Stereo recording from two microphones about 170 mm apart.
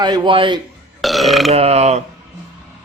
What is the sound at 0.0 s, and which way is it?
Speech, 25° right (ahead or behind).